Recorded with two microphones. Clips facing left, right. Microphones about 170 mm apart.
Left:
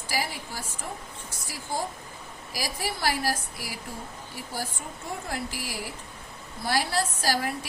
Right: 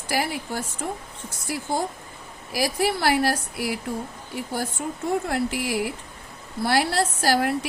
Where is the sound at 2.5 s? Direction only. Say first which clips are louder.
Right 9 dB; 60° right (ahead or behind).